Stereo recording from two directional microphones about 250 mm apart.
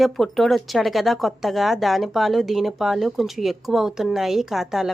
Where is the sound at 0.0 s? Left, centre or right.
Centre.